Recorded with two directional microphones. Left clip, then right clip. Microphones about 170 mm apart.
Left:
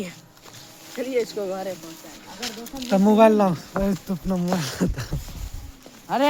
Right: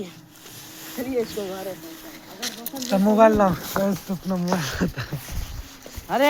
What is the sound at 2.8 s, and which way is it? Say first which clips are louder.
Speech: even; 40° left (ahead or behind).